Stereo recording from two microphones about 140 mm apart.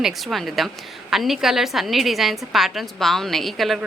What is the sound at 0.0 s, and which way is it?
Speech, centre (ahead or behind).